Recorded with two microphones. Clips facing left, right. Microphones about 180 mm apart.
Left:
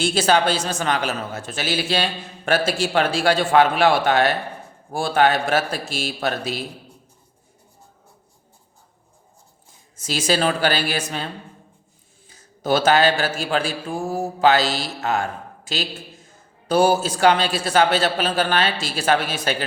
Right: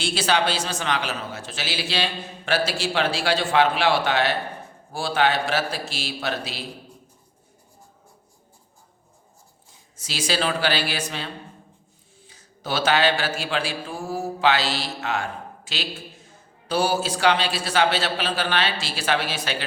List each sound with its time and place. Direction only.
0.0 s a man's voice: 45° left (ahead or behind)
10.0 s a man's voice: 45° left (ahead or behind)
12.3 s a man's voice: 45° left (ahead or behind)